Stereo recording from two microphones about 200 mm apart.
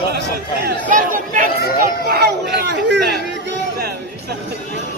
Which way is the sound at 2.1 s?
50° right (ahead or behind).